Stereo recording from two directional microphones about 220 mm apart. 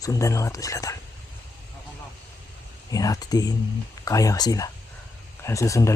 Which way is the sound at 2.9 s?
15° left (ahead or behind).